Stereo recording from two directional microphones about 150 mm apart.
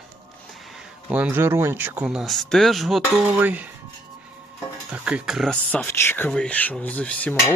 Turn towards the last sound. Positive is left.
turn(degrees=10)  # may be behind; listen again after turning